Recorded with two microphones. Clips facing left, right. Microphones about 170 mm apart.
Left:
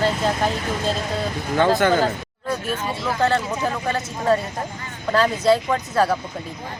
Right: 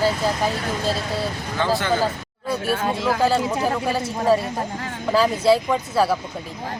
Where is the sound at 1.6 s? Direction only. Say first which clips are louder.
Left 5 dB; 50° left (ahead or behind).